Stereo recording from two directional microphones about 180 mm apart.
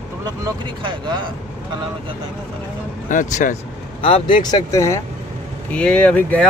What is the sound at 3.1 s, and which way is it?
Speech, 45° left (ahead or behind).